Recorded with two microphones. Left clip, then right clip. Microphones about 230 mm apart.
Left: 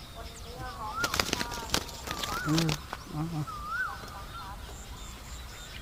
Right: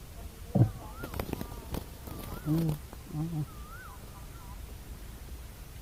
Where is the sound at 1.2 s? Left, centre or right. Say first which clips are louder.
Left 9 dB; centre.